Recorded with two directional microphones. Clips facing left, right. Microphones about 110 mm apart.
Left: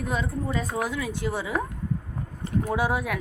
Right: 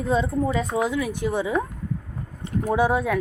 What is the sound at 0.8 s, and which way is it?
Speech, 15° right (ahead or behind).